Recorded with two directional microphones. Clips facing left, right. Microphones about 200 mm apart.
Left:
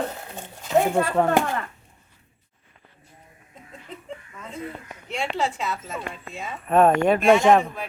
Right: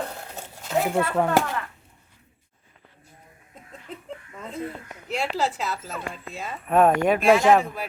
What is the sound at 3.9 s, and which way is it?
Chuckle, centre (ahead or behind).